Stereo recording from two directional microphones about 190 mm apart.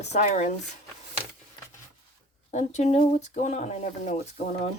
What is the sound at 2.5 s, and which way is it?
Speech, 35° left (ahead or behind).